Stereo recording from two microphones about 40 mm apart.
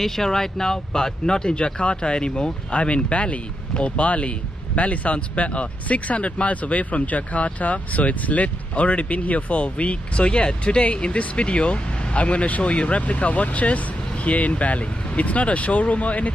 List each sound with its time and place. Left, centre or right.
0.0 s speech: centre; by 16.3 s left